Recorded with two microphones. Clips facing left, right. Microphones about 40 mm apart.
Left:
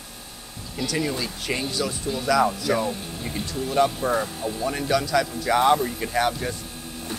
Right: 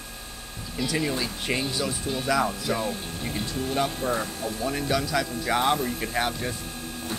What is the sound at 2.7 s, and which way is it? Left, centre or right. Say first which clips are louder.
Speech: left 4 dB; left.